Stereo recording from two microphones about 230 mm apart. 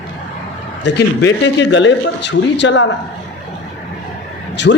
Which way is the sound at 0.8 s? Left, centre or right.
Left.